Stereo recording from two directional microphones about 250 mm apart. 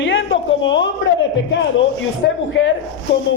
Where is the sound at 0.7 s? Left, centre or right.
Left.